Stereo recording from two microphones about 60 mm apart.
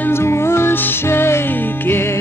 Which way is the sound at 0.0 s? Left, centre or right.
Left.